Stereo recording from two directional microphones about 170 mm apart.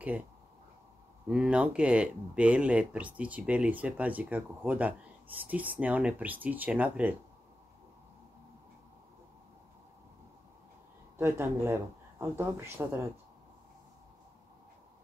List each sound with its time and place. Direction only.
1.3 s speech: 5° right (ahead or behind)
11.1 s speech: 15° right (ahead or behind)